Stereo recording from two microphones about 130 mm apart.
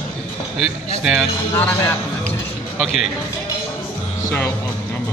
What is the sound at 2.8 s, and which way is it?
Speech, 5° right (ahead or behind).